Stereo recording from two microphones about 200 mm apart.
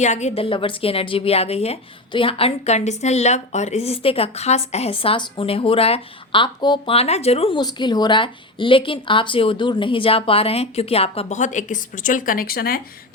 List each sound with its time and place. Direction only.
0.0 s a woman's voice: 35° left (ahead or behind)